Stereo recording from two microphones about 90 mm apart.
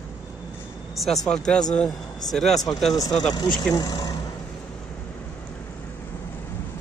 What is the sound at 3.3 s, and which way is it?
Speech, 45° left (ahead or behind).